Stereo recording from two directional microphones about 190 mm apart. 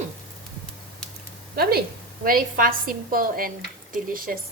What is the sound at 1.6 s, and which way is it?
A woman's voice, 55° right (ahead or behind).